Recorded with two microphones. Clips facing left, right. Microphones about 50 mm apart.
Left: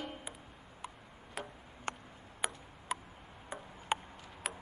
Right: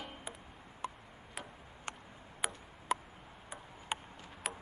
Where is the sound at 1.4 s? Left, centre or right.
Centre.